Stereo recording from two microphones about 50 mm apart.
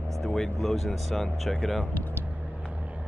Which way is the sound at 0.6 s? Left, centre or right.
Centre.